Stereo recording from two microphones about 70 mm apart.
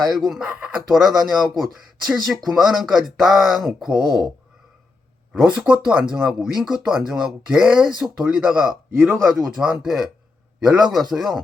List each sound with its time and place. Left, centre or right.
0.0 s speech: centre
0.4 s speech: centre
0.9 s speech: centre
5.3 s speech: centre
9.1 s speech: centre